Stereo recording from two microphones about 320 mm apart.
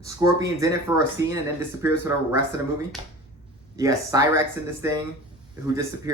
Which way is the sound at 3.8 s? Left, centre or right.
Centre.